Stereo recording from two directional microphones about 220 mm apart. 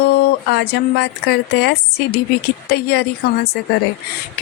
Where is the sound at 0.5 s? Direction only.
50° left (ahead or behind).